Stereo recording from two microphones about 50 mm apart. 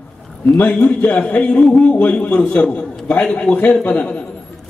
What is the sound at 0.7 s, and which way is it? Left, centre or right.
A man's voice, left.